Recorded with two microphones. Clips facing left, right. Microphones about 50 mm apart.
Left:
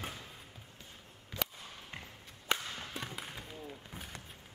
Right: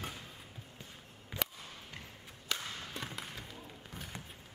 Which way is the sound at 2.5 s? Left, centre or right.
Left.